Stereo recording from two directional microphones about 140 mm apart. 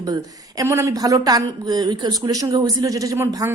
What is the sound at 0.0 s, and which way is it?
Speech, 25° right (ahead or behind).